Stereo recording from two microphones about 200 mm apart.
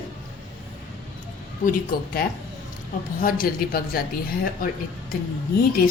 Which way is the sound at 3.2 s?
45° left (ahead or behind).